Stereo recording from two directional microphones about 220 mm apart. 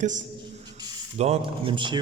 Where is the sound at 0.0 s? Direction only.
35° right (ahead or behind).